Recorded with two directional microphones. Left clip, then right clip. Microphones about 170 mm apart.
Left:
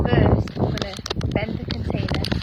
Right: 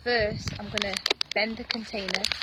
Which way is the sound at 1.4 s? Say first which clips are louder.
Even; 15° right (ahead or behind).